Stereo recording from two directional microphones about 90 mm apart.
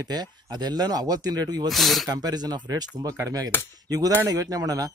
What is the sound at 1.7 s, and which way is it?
Speech, centre (ahead or behind).